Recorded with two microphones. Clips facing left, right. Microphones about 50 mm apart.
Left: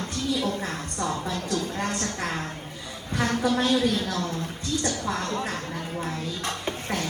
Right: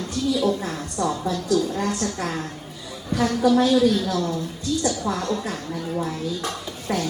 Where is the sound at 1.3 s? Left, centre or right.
Left.